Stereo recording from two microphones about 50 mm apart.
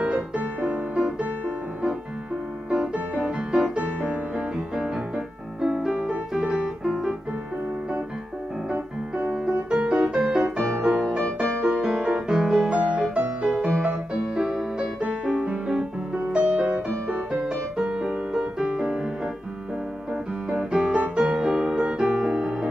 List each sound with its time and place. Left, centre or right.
0.4 s music: right
2.7 s piano: right
3.3 s music: right
4.4 s music: centre
8.7 s piano: right
10.8 s music: centre
17.4 s music: centre
20.4 s music: centre
21.8 s piano: centre